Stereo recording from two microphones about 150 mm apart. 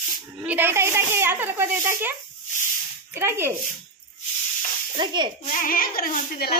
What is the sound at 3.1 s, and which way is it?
Speech, 15° right (ahead or behind).